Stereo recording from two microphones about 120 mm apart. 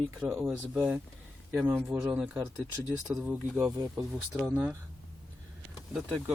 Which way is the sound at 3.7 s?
30° right (ahead or behind).